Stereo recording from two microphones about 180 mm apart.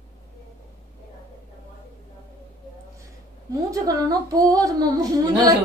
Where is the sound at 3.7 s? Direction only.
20° right (ahead or behind).